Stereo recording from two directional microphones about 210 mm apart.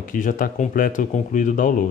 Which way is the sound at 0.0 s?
40° left (ahead or behind).